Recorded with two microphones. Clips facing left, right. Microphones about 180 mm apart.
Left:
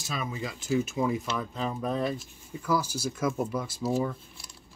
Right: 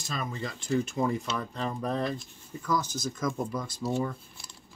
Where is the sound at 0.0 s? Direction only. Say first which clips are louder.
Left 1 dB; 5° left (ahead or behind).